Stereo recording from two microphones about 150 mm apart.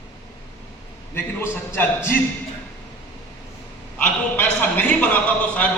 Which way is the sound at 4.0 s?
10° left (ahead or behind).